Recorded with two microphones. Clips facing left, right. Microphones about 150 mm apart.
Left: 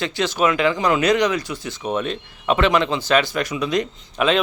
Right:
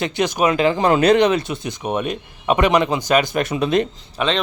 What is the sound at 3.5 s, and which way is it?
Speech, 55° right (ahead or behind).